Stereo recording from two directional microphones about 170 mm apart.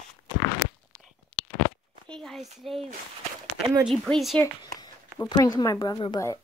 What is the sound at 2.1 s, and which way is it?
Speech, centre (ahead or behind).